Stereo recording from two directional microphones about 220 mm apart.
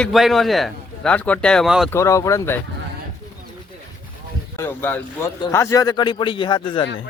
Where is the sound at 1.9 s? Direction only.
15° left (ahead or behind).